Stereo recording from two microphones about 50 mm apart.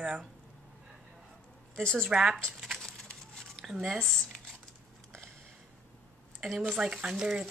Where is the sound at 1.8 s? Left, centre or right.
Centre.